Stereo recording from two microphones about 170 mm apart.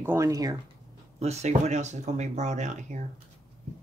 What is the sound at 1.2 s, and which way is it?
Speech, 40° right (ahead or behind).